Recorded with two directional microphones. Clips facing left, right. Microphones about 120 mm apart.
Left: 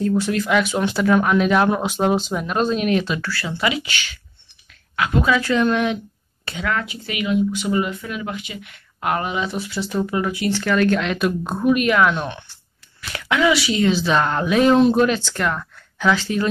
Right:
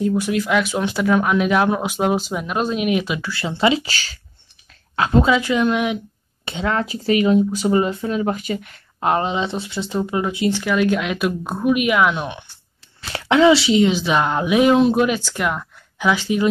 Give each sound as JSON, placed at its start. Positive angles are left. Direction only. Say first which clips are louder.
{"t": 0.0, "sound": "speech", "louder": "even", "side_deg": -10}
{"t": 5.3, "sound": "speech", "louder": "right 1 dB", "side_deg": -15}
{"t": 6.4, "sound": "speech", "louder": "right 3 dB", "side_deg": -25}
{"t": 9.0, "sound": "speech", "louder": "right 3 dB", "side_deg": -25}
{"t": 10.6, "sound": "speech", "louder": "left 3 dB", "side_deg": -10}
{"t": 13.0, "sound": "speech", "louder": "right 5 dB", "side_deg": -30}